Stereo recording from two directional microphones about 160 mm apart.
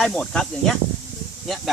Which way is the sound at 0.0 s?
5° left (ahead or behind).